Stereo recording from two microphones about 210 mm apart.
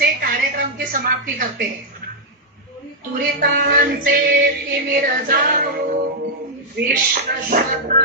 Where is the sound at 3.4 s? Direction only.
45° right (ahead or behind).